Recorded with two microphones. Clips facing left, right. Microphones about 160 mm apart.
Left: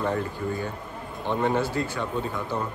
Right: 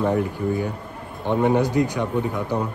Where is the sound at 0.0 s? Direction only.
15° right (ahead or behind).